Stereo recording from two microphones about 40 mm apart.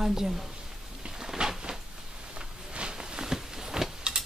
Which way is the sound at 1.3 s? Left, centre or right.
Centre.